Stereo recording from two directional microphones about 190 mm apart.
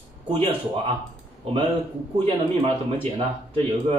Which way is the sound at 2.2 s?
30° right (ahead or behind).